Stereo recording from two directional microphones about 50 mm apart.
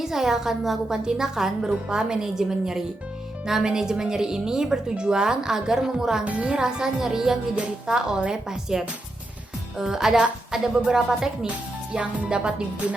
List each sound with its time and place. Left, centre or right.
0.0 s a woman's voice: centre
6.2 s speech: right
6.6 s a woman's voice: centre